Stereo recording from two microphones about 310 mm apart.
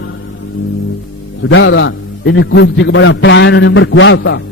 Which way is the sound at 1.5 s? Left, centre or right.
Left.